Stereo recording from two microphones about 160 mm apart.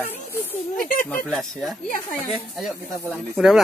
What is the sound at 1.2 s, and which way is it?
Speech, 5° left (ahead or behind).